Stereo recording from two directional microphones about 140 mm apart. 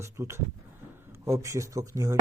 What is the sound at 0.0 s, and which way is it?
Speech, 20° right (ahead or behind).